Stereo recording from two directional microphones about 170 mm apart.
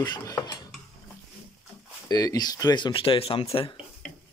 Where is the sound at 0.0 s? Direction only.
25° left (ahead or behind).